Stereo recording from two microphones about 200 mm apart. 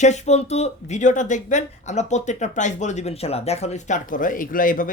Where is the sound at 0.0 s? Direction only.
35° left (ahead or behind).